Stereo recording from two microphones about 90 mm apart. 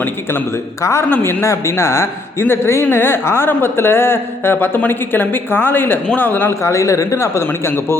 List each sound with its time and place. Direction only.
0.0 s speech: 25° left (ahead or behind)
6.5 s a man's voice: 35° left (ahead or behind)